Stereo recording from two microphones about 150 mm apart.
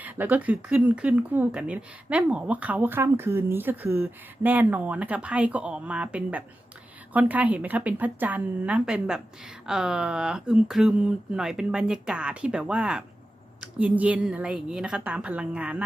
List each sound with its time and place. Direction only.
0.0 s speech: 10° right (ahead or behind)